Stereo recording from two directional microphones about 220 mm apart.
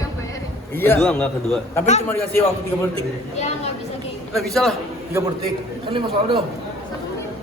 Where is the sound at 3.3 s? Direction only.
30° left (ahead or behind).